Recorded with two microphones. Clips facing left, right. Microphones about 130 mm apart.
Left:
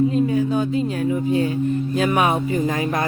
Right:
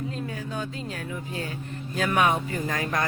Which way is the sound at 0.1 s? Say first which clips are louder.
Left 14 dB; 15° left (ahead or behind).